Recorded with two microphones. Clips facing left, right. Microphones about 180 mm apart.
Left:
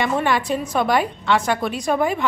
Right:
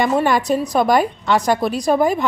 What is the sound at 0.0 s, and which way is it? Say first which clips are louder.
A woman's voice: right 4 dB; 40° right (ahead or behind).